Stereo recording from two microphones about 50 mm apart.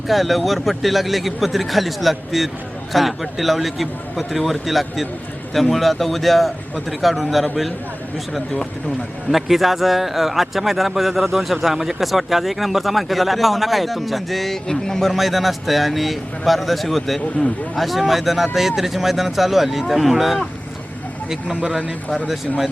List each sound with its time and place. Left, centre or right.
0.1 s a man's voice: centre
9.3 s a man's voice: centre
21.5 s speech: right
22.3 s a man's voice: centre